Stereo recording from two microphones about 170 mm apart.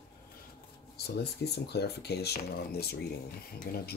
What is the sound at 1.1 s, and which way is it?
Speech, 70° left (ahead or behind).